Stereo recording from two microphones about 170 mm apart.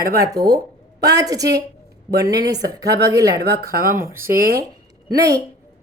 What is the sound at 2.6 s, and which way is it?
Speech, 20° right (ahead or behind).